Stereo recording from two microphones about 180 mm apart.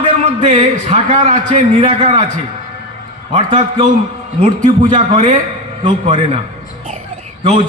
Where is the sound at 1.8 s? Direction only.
30° right (ahead or behind).